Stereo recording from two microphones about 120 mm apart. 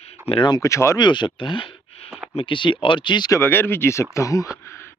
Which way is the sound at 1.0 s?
40° left (ahead or behind).